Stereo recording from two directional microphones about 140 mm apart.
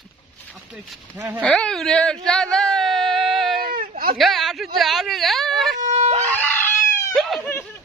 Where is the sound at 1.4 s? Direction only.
5° left (ahead or behind).